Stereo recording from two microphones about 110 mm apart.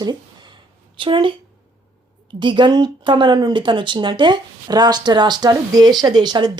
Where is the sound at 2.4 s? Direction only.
45° right (ahead or behind).